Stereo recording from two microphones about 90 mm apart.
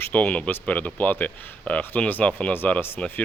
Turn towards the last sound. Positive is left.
turn(degrees=20)  # may be behind; listen again after turning